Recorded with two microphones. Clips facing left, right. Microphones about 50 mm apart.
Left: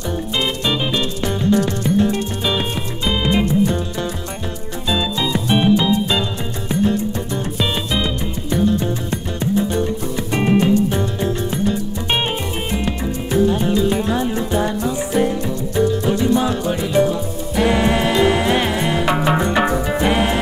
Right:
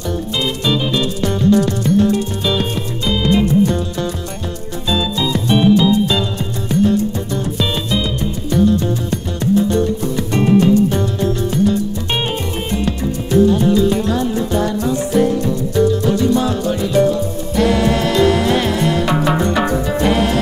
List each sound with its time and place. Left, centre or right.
0.4 s music: left
4.8 s music: centre